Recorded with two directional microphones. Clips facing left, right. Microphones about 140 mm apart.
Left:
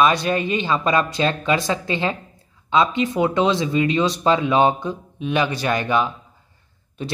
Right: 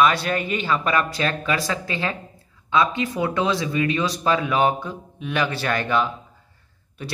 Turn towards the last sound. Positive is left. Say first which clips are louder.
# left 5 dB
turn(degrees=20)  # may be behind; listen again after turning